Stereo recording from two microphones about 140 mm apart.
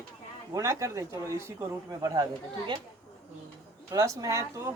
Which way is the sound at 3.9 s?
25° right (ahead or behind).